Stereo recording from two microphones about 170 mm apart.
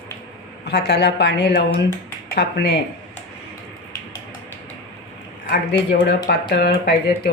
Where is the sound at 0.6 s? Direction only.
75° left (ahead or behind).